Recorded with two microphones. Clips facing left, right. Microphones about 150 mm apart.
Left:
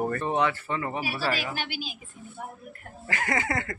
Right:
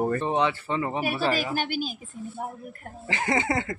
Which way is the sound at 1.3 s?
45° right (ahead or behind).